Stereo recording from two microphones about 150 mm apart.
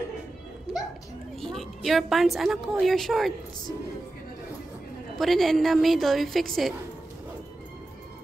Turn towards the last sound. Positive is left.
turn(degrees=0)  # may be behind; listen again after turning